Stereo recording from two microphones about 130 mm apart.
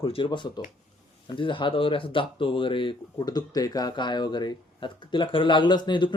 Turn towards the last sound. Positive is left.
turn(degrees=35)  # may be behind; listen again after turning